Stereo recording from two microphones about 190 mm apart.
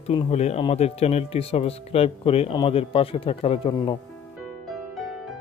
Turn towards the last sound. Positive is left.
turn(degrees=30)  # may be behind; listen again after turning